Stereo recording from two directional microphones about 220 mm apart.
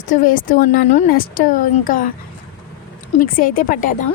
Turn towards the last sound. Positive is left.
turn(degrees=40)  # may be behind; listen again after turning